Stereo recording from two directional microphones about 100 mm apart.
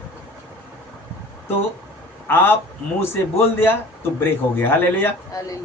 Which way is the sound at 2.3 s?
20° left (ahead or behind).